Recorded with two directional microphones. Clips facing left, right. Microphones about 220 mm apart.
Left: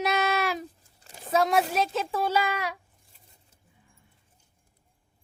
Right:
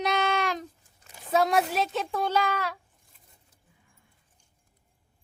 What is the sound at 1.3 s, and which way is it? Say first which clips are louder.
A child's voice: even; centre (ahead or behind).